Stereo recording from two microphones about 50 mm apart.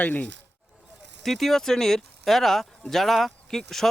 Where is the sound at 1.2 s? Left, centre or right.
Centre.